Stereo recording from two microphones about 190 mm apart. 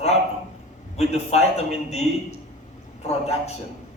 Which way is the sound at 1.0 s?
35° left (ahead or behind).